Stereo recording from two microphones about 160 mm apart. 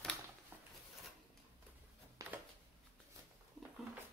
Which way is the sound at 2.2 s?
20° right (ahead or behind).